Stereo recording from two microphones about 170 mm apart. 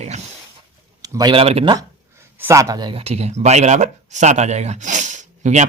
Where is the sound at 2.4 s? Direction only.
15° right (ahead or behind).